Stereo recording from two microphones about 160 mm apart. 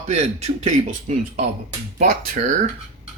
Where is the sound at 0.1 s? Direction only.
45° right (ahead or behind).